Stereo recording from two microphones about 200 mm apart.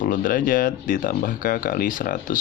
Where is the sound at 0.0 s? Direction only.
45° left (ahead or behind).